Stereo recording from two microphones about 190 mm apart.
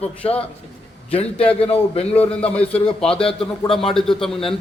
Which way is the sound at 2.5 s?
5° left (ahead or behind).